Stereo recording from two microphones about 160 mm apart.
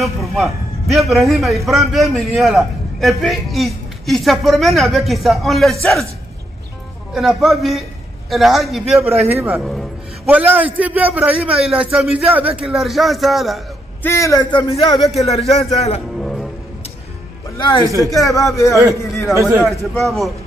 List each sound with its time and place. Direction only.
0.0 s a man's voice: centre (ahead or behind)
7.2 s a man's voice: centre (ahead or behind)
9.3 s speech: 10° right (ahead or behind)
9.6 s a man's voice: centre (ahead or behind)
14.0 s speech: 20° left (ahead or behind); by 16.0 s 40° left (ahead or behind)
16.2 s music: centre (ahead or behind)
17.6 s speech: 25° left (ahead or behind)
17.8 s speech: 20° right (ahead or behind)
18.1 s a man's voice: 20° left (ahead or behind)
20.0 s a man's voice: centre (ahead or behind)